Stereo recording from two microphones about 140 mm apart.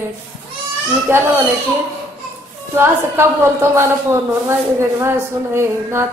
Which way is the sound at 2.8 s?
15° right (ahead or behind).